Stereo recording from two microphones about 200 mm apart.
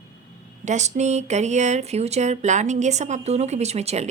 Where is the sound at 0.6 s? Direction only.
35° right (ahead or behind).